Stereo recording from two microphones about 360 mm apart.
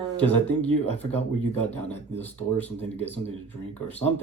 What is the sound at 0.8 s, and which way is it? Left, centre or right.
Speech, centre.